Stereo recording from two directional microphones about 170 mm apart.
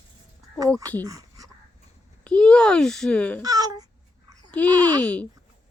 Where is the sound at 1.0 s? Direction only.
20° right (ahead or behind).